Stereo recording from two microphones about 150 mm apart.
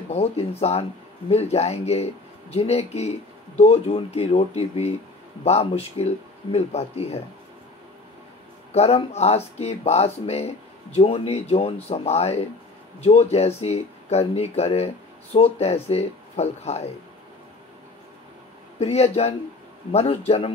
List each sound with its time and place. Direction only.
0.1 s speech: 45° left (ahead or behind)
8.7 s speech: 45° left (ahead or behind)
18.8 s a man's voice: 45° left (ahead or behind)